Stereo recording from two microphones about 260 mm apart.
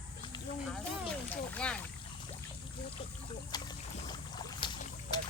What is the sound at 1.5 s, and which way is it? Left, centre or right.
Speech, centre.